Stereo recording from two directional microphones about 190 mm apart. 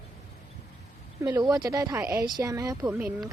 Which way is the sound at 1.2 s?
20° right (ahead or behind).